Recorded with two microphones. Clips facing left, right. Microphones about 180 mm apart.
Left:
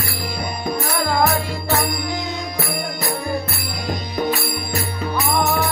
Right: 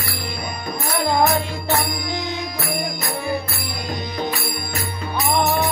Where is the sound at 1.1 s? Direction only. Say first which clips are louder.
Right 2 dB; 20° right (ahead or behind).